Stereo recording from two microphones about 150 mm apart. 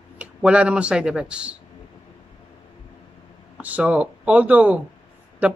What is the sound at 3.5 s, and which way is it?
A man's voice, 10° right (ahead or behind).